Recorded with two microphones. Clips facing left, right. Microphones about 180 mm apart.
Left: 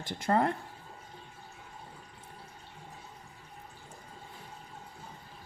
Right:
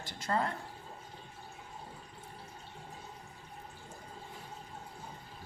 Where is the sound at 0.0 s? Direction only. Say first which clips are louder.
Left 6 dB; 55° left (ahead or behind).